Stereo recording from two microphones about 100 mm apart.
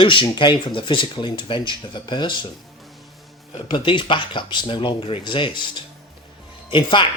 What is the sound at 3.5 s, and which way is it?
Speech, 55° left (ahead or behind).